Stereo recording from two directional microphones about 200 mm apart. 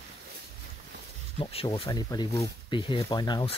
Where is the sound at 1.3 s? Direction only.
25° left (ahead or behind).